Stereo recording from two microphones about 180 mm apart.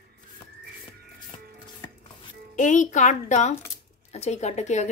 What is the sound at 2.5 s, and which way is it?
Speech, 45° left (ahead or behind).